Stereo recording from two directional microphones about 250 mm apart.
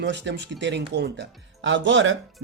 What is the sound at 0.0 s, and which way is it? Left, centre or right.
Speech, right.